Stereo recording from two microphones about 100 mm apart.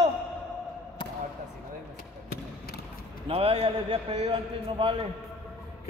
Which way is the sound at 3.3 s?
85° right.